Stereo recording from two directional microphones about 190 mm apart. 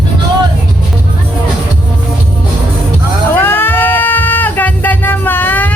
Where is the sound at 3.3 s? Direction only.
10° left (ahead or behind).